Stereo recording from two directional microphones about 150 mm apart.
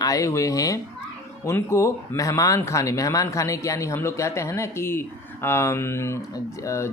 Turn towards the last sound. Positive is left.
turn(degrees=20)  # may be behind; listen again after turning